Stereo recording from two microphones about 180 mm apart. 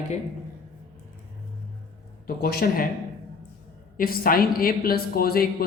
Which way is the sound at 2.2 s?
55° left (ahead or behind).